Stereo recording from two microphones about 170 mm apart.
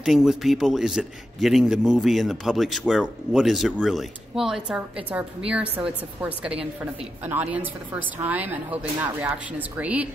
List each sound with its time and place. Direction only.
0.0 s a man's voice: 5° right (ahead or behind)